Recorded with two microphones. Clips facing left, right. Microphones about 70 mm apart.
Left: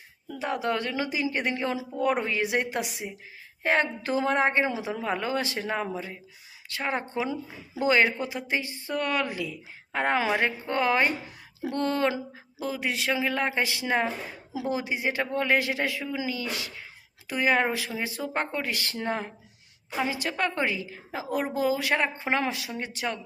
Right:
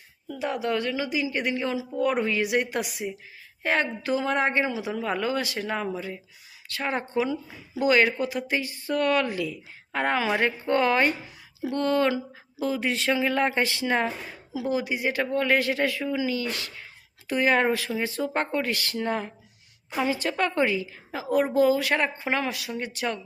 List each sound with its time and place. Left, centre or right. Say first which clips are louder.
0.3 s a woman's voice: right 1 dB; left; by 11.1 s centre
11.6 s a sound: right 3 dB; left
12.6 s speech: right 3 dB; centre
14.5 s a woman's voice: right 2 dB; left; by 18.7 s centre
18.7 s a woman's voice: right 2 dB; left
20.0 s a woman's voice: right 3 dB; centre